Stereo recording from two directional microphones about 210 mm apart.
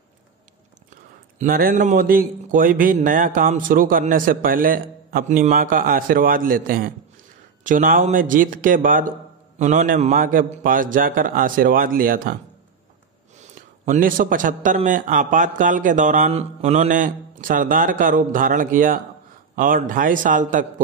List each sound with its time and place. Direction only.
1.4 s a man's voice: 45° right (ahead or behind)
13.4 s a man's voice: 40° right (ahead or behind)